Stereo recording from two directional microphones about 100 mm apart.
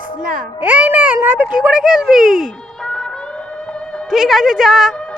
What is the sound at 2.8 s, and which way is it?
Music, 5° left (ahead or behind).